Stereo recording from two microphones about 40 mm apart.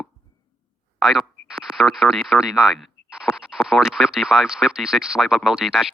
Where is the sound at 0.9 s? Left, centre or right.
Centre.